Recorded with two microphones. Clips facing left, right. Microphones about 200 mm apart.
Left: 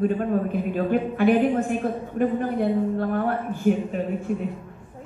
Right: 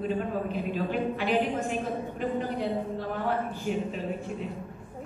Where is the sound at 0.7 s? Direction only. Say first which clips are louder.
Left 6 dB; 50° left (ahead or behind).